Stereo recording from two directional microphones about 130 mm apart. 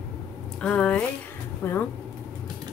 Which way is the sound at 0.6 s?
10° left (ahead or behind).